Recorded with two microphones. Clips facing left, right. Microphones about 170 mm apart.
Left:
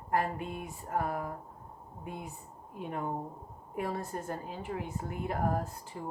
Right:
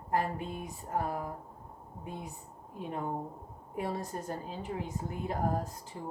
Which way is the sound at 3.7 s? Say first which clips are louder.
Even; 25° right (ahead or behind).